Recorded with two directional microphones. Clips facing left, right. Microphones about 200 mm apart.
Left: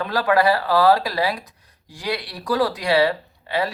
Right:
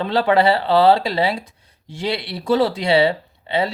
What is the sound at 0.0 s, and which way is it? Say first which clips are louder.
Speech: right 3 dB; 25° right (ahead or behind).